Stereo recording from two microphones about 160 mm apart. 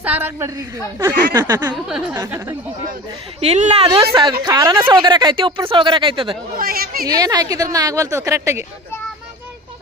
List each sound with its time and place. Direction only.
0.0 s a woman's voice: 10° right (ahead or behind)
1.7 s a sound: 5° right (ahead or behind)
2.1 s a woman's voice: 15° right (ahead or behind)
3.4 s speech: 40° right (ahead or behind)
4.2 s speech: 25° right (ahead or behind)
6.6 s a woman's voice: 65° right (ahead or behind)
7.1 s speech: 25° right (ahead or behind)